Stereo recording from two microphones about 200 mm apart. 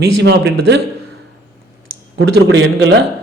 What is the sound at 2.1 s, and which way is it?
Speech, 65° right (ahead or behind).